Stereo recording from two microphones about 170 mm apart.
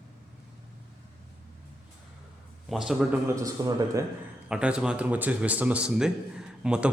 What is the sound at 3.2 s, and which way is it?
Speech, 20° right (ahead or behind).